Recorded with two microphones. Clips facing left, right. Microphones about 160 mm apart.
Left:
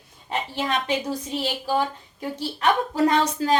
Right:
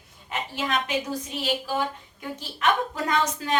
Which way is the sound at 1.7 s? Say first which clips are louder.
Left 4 dB; 35° left (ahead or behind).